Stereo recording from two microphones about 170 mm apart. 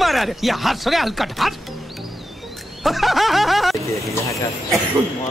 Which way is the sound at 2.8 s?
Centre (ahead or behind).